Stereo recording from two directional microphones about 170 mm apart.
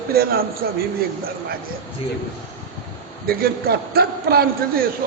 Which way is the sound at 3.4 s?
65° right (ahead or behind).